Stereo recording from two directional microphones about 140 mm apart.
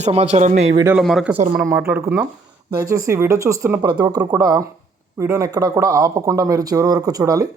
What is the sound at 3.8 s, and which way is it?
Speech, 30° right (ahead or behind).